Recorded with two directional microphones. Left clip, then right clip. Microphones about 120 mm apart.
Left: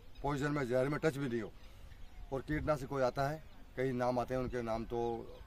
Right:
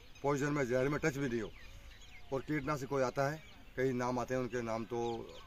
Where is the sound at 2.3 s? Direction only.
20° left (ahead or behind).